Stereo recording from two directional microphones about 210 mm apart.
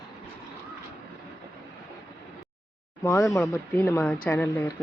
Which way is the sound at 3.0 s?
10° left (ahead or behind).